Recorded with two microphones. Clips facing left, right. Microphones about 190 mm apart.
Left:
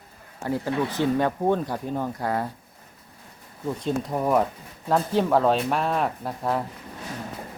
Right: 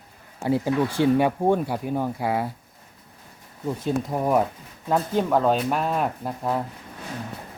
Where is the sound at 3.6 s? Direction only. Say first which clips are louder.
Right 1 dB; 5° right (ahead or behind).